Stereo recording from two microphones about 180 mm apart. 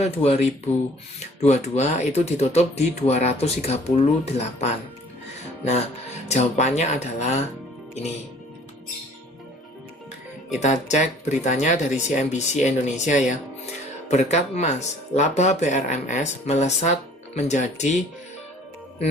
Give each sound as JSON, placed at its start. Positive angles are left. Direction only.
{"t": 0.0, "sound": "speech", "side_deg": 35}
{"t": 6.2, "sound": "speech", "side_deg": 40}
{"t": 10.6, "sound": "speech", "side_deg": 40}